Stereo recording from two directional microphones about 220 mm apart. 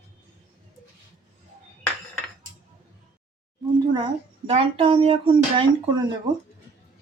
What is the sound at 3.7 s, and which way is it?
Speech, 20° right (ahead or behind).